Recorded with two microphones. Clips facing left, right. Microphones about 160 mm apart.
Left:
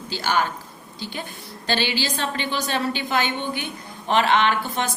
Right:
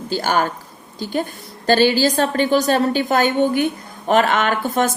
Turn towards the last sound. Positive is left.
turn(degrees=-50)  # may be behind; listen again after turning